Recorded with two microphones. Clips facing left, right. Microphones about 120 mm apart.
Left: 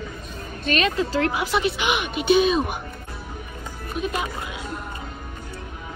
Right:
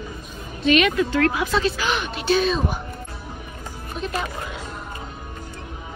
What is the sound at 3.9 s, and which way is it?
Speech, 5° left (ahead or behind).